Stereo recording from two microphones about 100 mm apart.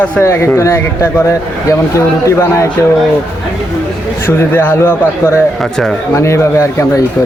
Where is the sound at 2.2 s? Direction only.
30° left (ahead or behind).